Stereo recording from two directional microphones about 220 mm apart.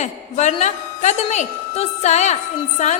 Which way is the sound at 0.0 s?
30° left (ahead or behind).